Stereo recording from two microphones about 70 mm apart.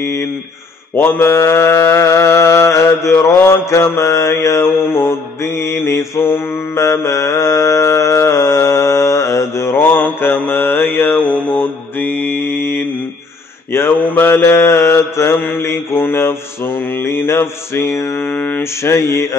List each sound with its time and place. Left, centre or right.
0.0 s mantra: left
18.2 s mantra: left
18.6 s mantra: left